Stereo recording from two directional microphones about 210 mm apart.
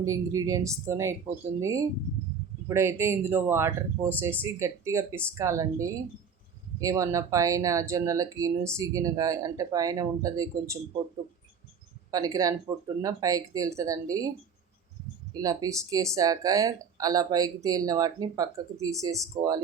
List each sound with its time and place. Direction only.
0.0 s speech: 15° right (ahead or behind)
12.1 s speech: 15° right (ahead or behind)
15.3 s speech: 15° right (ahead or behind)